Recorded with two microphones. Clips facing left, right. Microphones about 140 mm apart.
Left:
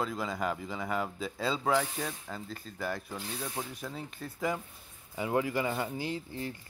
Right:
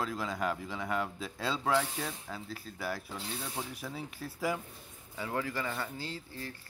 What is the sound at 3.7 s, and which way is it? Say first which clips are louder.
Speech: left 1 dB; 5° right (ahead or behind).